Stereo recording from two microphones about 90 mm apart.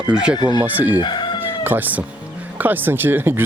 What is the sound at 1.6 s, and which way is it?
Speech, 20° right (ahead or behind).